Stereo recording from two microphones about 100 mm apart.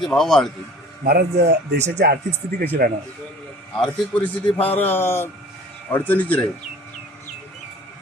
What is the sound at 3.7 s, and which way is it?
A man's voice, 10° left (ahead or behind).